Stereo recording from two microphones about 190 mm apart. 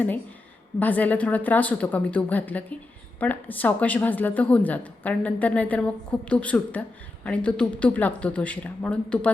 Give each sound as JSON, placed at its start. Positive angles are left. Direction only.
{"t": 0.8, "sound": "a woman's voice", "side_deg": 10}